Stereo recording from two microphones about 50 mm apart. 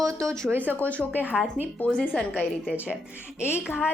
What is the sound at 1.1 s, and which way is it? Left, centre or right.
Speech, right.